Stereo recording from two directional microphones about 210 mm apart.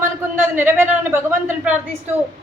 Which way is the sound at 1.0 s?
10° right (ahead or behind).